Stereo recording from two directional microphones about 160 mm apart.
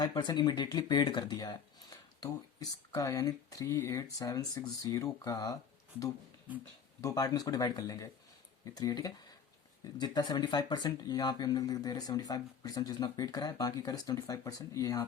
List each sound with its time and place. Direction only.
0.0 s speech: 25° left (ahead or behind)
2.9 s speech: 20° left (ahead or behind)
7.0 s speech: 20° left (ahead or behind)